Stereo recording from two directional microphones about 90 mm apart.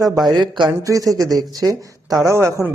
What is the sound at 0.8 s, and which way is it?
Speech, 40° right (ahead or behind).